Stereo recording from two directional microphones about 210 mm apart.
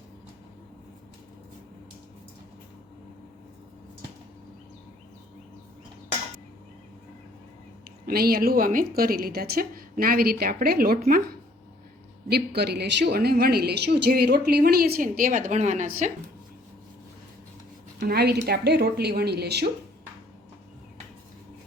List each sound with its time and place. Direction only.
8.0 s a woman's voice: 45° right (ahead or behind)
12.3 s a woman's voice: 50° right (ahead or behind)
18.0 s a woman's voice: 50° right (ahead or behind)